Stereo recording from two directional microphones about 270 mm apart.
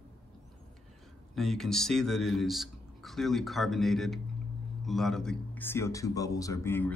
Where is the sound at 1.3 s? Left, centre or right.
Centre.